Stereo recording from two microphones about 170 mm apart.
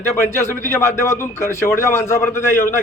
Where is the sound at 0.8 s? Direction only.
15° left (ahead or behind).